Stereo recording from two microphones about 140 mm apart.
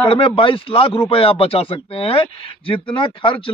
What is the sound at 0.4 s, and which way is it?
A man's voice, 40° left (ahead or behind).